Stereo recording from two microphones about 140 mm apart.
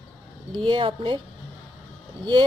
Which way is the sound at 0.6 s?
35° right (ahead or behind).